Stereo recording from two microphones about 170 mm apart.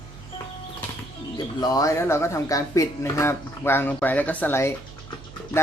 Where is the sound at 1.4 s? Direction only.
25° left (ahead or behind).